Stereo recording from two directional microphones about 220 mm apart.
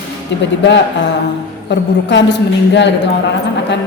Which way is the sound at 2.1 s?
55° left (ahead or behind).